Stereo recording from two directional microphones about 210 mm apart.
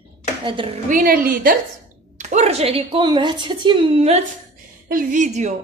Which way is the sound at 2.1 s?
30° right (ahead or behind).